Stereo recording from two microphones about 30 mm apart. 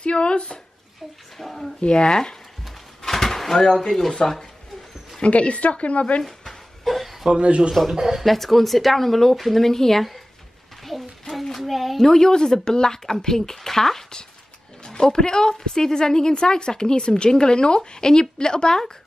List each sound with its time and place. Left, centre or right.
0.0 s speech: left
1.4 s speech: centre
1.8 s a woman's voice: left
3.0 s a sound: centre
3.5 s a woman's voice: left
3.9 s speech: centre
5.2 s a woman's voice: left
6.2 s a sound: centre
7.2 s speech: right
7.9 s speech: centre
8.3 s speech: centre
10.8 s a sound: centre
12.0 s a woman's voice: centre